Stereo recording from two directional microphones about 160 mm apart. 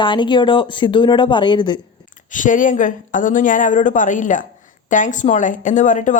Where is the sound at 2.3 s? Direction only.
55° left (ahead or behind).